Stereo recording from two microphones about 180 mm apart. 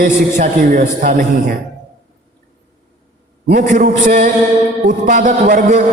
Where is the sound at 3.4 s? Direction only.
50° right (ahead or behind).